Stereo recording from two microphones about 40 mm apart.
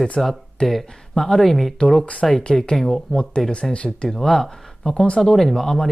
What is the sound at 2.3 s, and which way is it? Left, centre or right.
Speech, centre.